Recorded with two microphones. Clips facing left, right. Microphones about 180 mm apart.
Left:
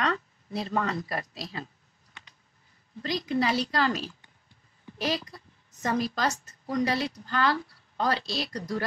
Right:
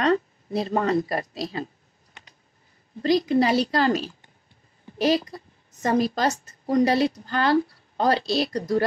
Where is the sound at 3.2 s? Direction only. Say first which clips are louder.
Right 6 dB; 30° right (ahead or behind).